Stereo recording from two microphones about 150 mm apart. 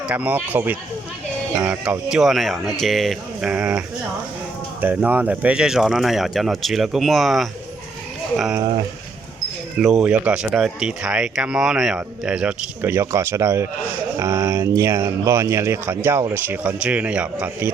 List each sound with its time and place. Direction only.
0.1 s speech: 10° right (ahead or behind)
9.8 s speech: centre (ahead or behind)